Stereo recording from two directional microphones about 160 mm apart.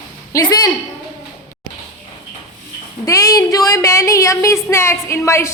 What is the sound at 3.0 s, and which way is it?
A woman's voice, 20° left (ahead or behind).